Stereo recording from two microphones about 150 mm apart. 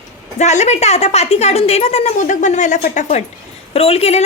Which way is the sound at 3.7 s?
40° left (ahead or behind).